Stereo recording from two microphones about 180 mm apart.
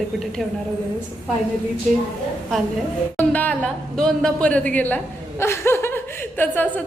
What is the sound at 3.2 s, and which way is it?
Speech, 10° left (ahead or behind).